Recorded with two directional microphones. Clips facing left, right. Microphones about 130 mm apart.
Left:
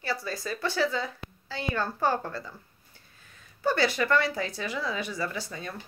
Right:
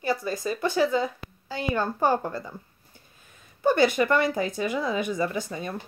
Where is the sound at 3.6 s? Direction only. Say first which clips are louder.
Right 5 dB; 20° right (ahead or behind).